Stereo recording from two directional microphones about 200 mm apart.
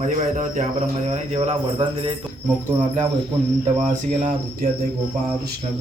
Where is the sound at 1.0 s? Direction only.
30° right (ahead or behind).